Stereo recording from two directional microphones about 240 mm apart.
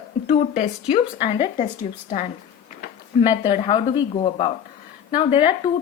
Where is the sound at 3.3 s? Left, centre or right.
Centre.